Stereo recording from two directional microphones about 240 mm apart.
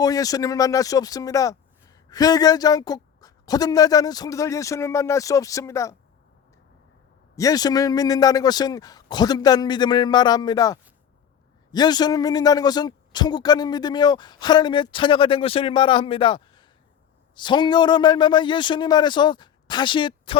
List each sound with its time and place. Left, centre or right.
0.0 s speech: centre
7.3 s a man's voice: centre